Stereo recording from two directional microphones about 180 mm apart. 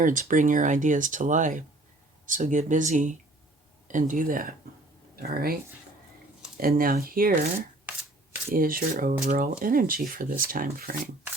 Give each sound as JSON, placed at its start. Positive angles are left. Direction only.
{"t": 0.0, "sound": "speech", "side_deg": -45}
{"t": 6.6, "sound": "speech", "side_deg": -55}
{"t": 8.5, "sound": "speech", "side_deg": -55}